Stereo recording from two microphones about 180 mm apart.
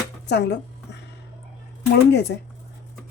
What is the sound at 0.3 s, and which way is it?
Speech, 70° left (ahead or behind).